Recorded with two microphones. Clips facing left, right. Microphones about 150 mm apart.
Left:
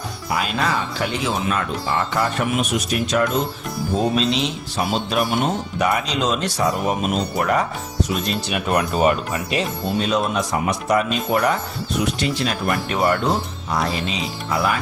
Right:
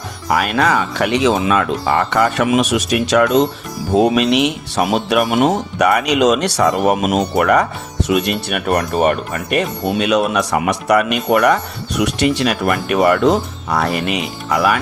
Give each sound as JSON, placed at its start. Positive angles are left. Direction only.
{"t": 0.3, "sound": "speech", "side_deg": -70}
{"t": 9.9, "sound": "speech", "side_deg": -75}